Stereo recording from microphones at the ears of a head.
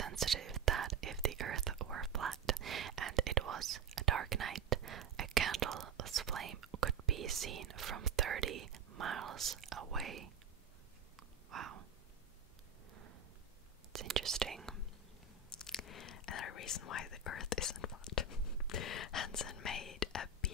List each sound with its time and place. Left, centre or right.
0.0 s whispering: right
11.1 s a sound: right
13.9 s whispering: right
15.8 s whispering: left